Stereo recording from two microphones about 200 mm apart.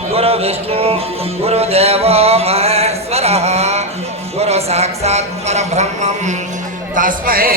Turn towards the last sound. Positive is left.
turn(degrees=-45)  # may be behind; listen again after turning